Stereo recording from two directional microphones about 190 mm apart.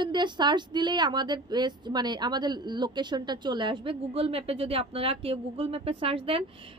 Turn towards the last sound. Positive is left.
turn(degrees=-30)  # may be behind; listen again after turning